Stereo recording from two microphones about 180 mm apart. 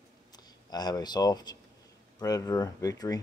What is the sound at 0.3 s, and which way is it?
Speech, 20° left (ahead or behind).